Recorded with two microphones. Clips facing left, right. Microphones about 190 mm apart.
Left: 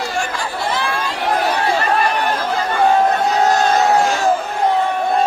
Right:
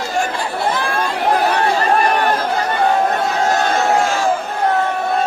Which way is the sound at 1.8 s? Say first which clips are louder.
Right 2 dB; 45° right (ahead or behind).